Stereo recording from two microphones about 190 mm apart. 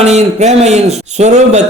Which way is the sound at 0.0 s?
35° right (ahead or behind).